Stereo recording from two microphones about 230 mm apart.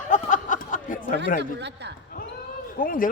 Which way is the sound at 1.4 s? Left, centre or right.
Right.